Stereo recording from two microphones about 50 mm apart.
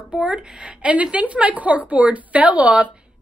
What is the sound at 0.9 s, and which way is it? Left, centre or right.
A woman's voice, right.